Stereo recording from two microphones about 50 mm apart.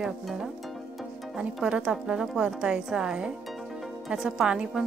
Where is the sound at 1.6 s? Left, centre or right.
Centre.